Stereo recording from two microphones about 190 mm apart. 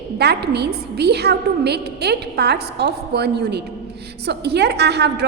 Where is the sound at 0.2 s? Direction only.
60° right (ahead or behind).